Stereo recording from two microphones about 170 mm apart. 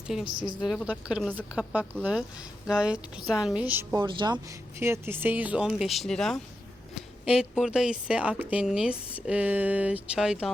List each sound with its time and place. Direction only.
0.3 s a woman's voice: 30° right (ahead or behind)
0.6 s a woman's voice: centre (ahead or behind)
4.0 s speech: 30° right (ahead or behind); by 10.5 s 5° right (ahead or behind)